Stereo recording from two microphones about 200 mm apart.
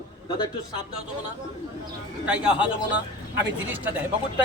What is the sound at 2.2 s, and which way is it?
Speech, 5° right (ahead or behind).